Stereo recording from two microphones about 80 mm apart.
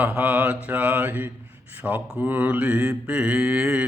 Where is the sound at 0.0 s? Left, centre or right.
Centre.